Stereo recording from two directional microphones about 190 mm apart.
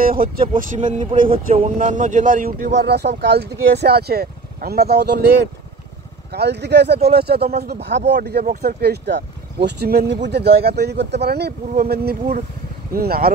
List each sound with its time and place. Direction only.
0.0 s a man's voice: 50° right (ahead or behind)